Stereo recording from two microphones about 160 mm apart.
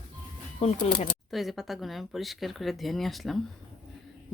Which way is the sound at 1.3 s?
Centre (ahead or behind).